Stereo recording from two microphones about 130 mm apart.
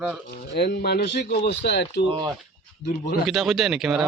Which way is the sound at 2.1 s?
40° right (ahead or behind).